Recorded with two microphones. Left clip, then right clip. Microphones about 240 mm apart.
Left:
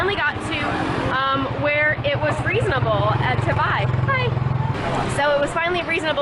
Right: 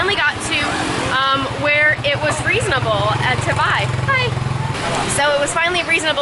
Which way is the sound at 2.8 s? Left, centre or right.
Left.